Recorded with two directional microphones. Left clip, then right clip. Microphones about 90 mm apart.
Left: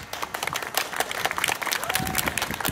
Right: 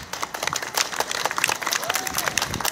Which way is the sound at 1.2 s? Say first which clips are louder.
Right 2 dB; 5° left (ahead or behind).